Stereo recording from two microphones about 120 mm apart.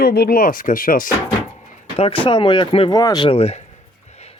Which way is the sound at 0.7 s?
90° left.